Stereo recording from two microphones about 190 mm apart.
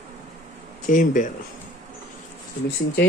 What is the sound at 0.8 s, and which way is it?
Mantra, 45° left (ahead or behind).